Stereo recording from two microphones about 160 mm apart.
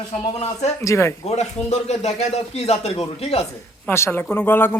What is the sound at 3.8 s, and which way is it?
Speech, 15° left (ahead or behind).